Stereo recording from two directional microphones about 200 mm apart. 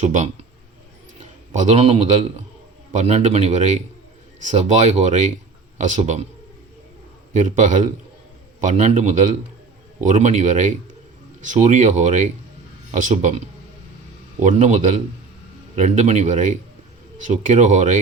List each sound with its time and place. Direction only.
0.0 s speech: 35° right (ahead or behind)
1.5 s speech: 35° right (ahead or behind)
7.3 s speech: 35° right (ahead or behind)